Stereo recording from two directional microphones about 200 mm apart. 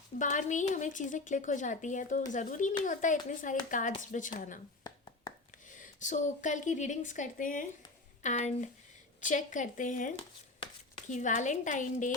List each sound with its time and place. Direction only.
0.2 s a woman's voice: 40° left (ahead or behind)
4.8 s a sound: 20° left (ahead or behind)
5.7 s a woman's voice: 40° left (ahead or behind)